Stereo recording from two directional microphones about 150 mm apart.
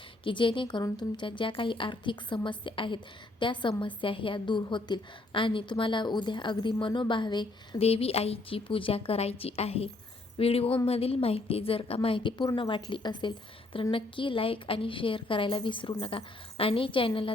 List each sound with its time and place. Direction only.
0.3 s a woman's voice: 35° left (ahead or behind)
7.8 s a woman's voice: 40° left (ahead or behind)